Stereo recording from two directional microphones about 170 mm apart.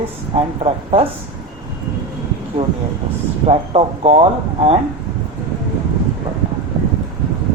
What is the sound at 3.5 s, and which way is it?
Speech, 35° right (ahead or behind).